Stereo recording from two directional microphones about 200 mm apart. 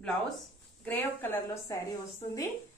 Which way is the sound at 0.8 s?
10° left (ahead or behind).